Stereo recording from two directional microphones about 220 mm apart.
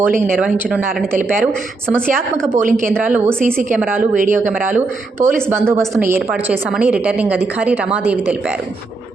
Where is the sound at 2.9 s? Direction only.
5° right (ahead or behind).